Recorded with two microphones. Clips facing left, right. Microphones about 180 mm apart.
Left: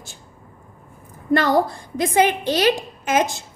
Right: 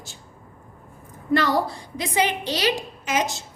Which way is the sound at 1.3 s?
50° left (ahead or behind).